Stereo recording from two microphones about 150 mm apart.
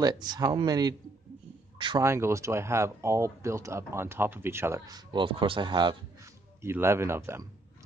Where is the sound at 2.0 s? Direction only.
20° right (ahead or behind).